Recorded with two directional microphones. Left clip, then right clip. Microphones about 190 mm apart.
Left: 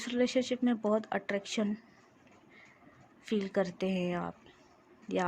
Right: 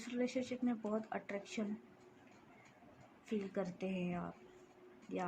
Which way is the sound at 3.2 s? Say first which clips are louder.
Left 10 dB; 55° left (ahead or behind).